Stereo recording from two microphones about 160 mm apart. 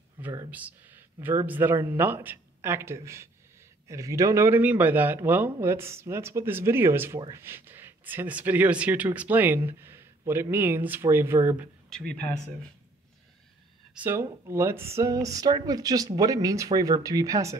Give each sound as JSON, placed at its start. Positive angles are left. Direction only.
{"t": 0.2, "sound": "speech", "side_deg": -15}
{"t": 11.9, "sound": "speech", "side_deg": 5}
{"t": 13.9, "sound": "speech", "side_deg": -15}